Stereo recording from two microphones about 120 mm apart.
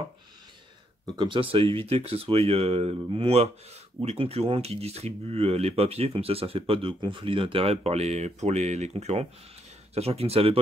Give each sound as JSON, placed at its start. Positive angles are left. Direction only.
{"t": 1.0, "sound": "speech", "side_deg": -40}